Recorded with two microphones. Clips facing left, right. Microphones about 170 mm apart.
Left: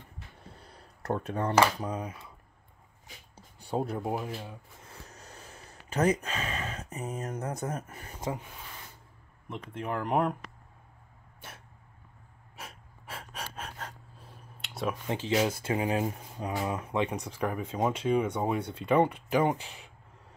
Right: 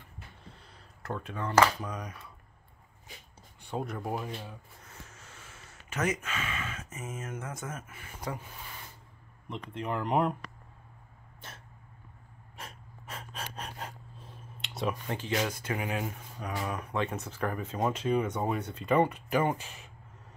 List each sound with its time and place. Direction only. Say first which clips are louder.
0.7 s speech: left 6 dB; 40° left (ahead or behind); by 2.3 s 25° left (ahead or behind)
3.3 s a sound: left 4 dB; 35° left (ahead or behind)
4.1 s speech: left 2 dB; 5° left (ahead or behind)
4.8 s a sound: left 2 dB; 35° left (ahead or behind)
8.2 s speech: left 3 dB; 20° left (ahead or behind)
9.5 s speech: even; 5° left (ahead or behind)
12.5 s gasp: even; 10° left (ahead or behind)
13.7 s gasp: right 1 dB; 15° right (ahead or behind)
14.2 s a sound: right 1 dB; 5° left (ahead or behind)
15.0 s speech: left 4 dB; 25° left (ahead or behind)